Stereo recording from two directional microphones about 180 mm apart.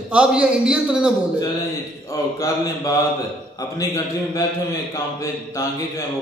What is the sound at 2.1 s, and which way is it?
A man's voice, 15° left (ahead or behind).